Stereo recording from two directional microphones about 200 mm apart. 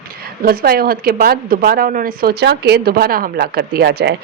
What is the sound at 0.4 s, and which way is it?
Speech, 50° right (ahead or behind).